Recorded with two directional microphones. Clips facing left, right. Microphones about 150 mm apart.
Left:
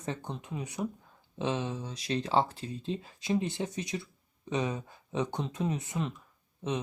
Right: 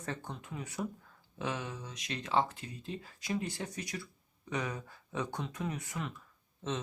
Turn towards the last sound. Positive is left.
turn(degrees=15)  # may be behind; listen again after turning